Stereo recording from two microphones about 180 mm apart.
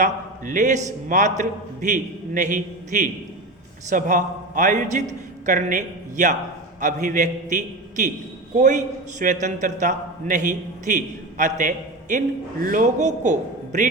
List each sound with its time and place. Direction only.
0.0 s a man's voice: 45° right (ahead or behind)